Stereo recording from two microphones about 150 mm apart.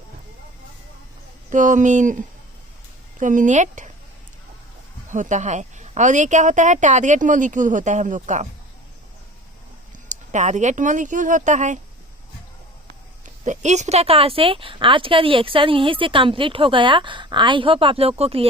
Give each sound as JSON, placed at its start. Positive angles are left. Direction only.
{"t": 1.5, "sound": "a woman's voice", "side_deg": -60}
{"t": 5.0, "sound": "a woman's voice", "side_deg": -55}
{"t": 10.1, "sound": "speech", "side_deg": -50}
{"t": 13.2, "sound": "a woman's voice", "side_deg": -55}